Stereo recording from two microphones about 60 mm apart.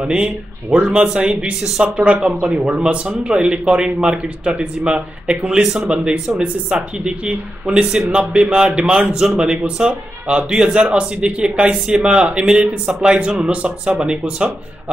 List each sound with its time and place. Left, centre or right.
0.0 s speech: centre